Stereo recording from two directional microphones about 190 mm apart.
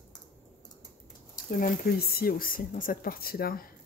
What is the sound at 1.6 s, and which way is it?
A woman's voice, 55° left (ahead or behind).